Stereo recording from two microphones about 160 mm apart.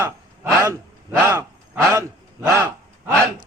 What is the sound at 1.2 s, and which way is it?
A man's voice, 15° right (ahead or behind).